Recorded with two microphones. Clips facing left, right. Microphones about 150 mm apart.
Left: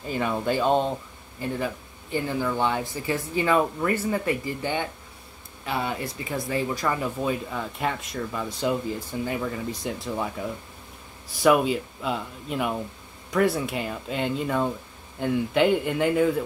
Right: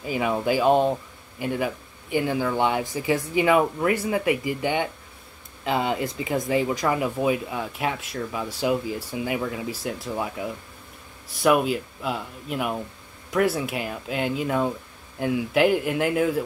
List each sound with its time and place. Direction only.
0.0 s speech: 10° right (ahead or behind)